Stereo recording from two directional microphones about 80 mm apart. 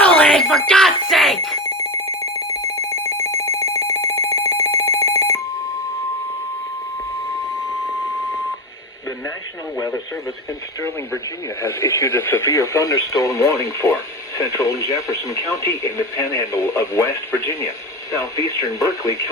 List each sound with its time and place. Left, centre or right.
0.0 s alarm: centre
2.8 s telephone: left
9.7 s radio: left
10.8 s speech: left